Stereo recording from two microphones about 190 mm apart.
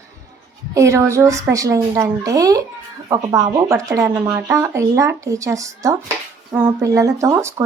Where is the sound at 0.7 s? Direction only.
15° right (ahead or behind).